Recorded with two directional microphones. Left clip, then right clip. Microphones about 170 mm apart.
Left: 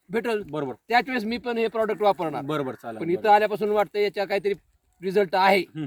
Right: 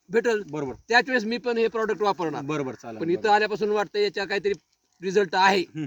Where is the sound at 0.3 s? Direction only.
5° left (ahead or behind).